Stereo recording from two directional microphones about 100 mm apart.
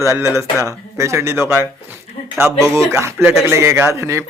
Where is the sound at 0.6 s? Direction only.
35° right (ahead or behind).